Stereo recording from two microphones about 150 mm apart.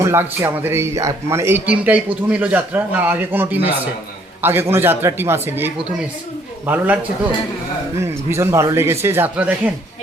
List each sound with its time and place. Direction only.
0.0 s a man's voice: 15° right (ahead or behind)
8.3 s a man's voice: 20° right (ahead or behind)